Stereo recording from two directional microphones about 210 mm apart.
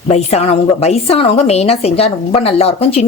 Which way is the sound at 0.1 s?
30° left (ahead or behind).